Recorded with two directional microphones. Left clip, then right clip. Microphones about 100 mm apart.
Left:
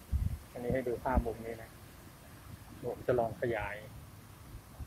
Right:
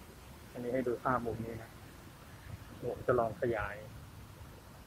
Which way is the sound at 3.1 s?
15° left (ahead or behind).